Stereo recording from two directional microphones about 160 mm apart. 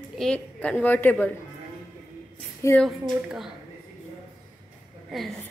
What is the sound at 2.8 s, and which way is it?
Speech, centre (ahead or behind).